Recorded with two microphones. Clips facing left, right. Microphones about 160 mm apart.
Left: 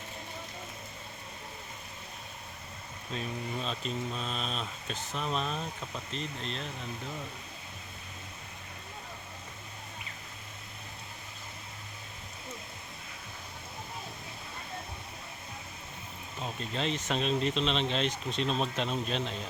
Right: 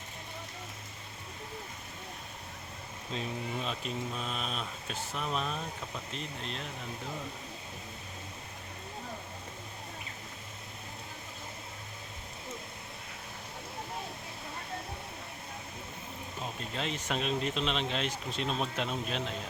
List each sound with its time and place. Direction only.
3.1 s speech: 15° right (ahead or behind)
16.7 s speech: 5° right (ahead or behind)